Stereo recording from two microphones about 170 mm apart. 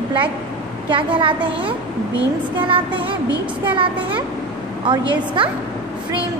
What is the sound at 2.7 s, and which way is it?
Child singing, 30° right (ahead or behind).